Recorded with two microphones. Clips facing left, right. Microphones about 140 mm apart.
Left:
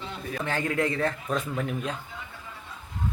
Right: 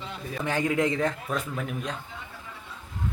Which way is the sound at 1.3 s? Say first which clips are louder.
Left 2 dB; centre (ahead or behind).